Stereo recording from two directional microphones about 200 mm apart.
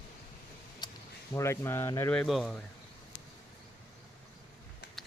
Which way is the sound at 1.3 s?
15° left (ahead or behind).